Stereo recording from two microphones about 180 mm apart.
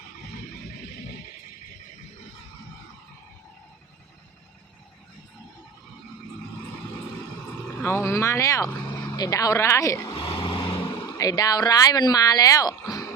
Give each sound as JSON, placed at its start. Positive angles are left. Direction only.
{"t": 7.8, "sound": "speech", "side_deg": 10}